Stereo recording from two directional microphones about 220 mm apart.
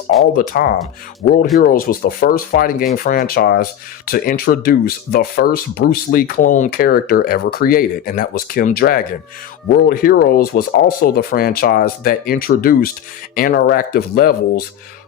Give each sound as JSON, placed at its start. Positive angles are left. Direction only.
{"t": 0.3, "sound": "speech", "side_deg": 40}